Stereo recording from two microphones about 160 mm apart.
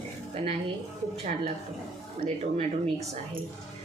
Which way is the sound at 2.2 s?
45° right (ahead or behind).